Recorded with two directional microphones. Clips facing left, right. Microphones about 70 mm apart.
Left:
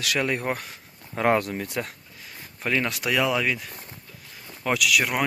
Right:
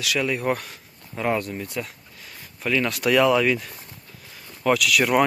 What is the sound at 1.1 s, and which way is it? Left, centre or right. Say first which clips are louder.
Speech: left 3 dB; left.